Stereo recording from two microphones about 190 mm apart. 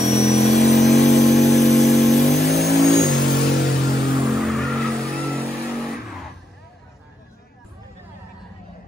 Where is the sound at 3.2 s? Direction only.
50° left (ahead or behind).